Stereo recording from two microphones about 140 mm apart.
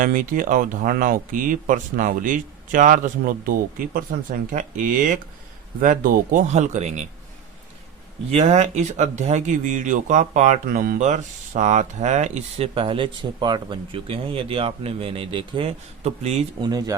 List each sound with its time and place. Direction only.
0.0 s speech: 75° right (ahead or behind)
6.5 s a man's voice: 55° right (ahead or behind)
8.3 s speech: 45° right (ahead or behind)
16.6 s speech: 30° right (ahead or behind)